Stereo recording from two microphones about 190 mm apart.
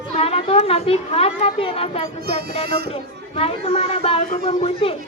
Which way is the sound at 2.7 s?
55° right (ahead or behind).